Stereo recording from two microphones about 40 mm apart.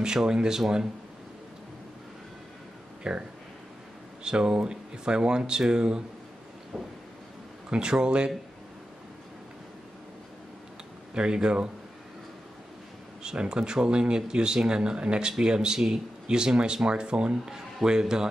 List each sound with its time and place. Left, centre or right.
0.0 s speech: centre
3.0 s speech: right
7.7 s speech: right
11.1 s speech: right
13.2 s speech: centre